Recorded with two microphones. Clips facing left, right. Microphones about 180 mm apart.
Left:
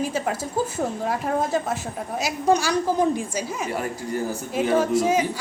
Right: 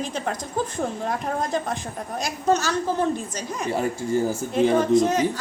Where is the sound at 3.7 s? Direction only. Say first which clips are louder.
Right 4 dB; 25° right (ahead or behind).